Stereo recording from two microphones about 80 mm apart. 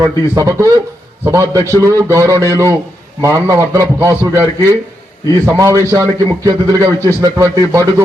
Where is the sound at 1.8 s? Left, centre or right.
Right.